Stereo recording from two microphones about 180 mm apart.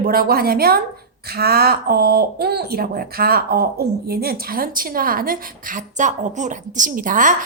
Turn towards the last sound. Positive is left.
turn(degrees=-45)  # may be behind; listen again after turning